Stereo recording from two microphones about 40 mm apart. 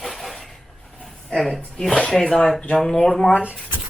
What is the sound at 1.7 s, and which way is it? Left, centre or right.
Speech, centre.